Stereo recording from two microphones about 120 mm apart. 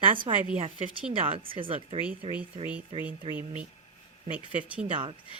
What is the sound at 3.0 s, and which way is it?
Speech, 15° right (ahead or behind).